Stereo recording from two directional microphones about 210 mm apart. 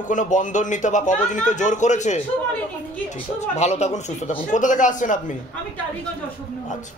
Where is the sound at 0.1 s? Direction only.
35° left (ahead or behind).